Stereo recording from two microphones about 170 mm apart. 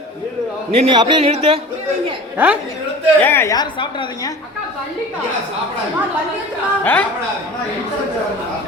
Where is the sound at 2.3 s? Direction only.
10° right (ahead or behind).